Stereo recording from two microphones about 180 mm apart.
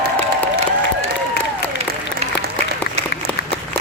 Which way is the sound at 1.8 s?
35° right (ahead or behind).